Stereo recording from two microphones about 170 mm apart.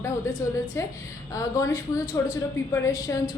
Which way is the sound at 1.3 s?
20° left (ahead or behind).